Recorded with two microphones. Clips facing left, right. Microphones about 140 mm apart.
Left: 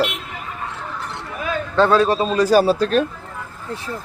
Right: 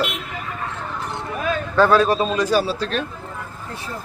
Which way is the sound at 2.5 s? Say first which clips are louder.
Left 5 dB; 45° left (ahead or behind).